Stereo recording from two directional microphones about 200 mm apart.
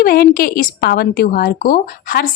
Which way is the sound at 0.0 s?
45° left (ahead or behind).